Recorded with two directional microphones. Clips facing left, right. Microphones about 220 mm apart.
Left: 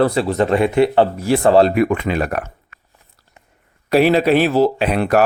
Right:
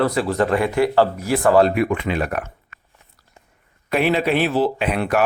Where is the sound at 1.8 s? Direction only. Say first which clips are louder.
Left 3 dB; 45° left (ahead or behind).